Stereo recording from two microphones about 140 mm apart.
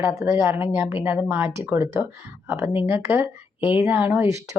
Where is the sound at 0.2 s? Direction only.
20° right (ahead or behind).